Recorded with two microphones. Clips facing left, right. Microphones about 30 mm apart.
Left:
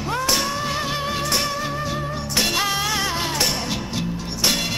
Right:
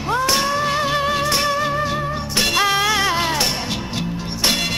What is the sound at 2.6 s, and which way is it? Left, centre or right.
Music, right.